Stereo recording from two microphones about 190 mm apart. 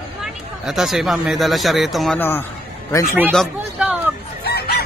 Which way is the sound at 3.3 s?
Centre (ahead or behind).